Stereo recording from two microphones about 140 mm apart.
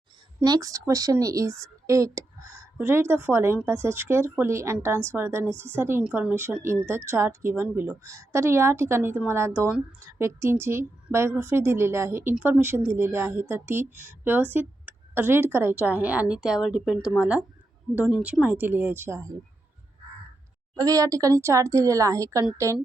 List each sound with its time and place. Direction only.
0.4 s a woman's voice: 25° right (ahead or behind)
20.7 s a woman's voice: 25° right (ahead or behind)